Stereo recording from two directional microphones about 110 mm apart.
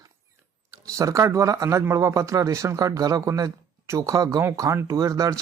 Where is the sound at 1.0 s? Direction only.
30° right (ahead or behind).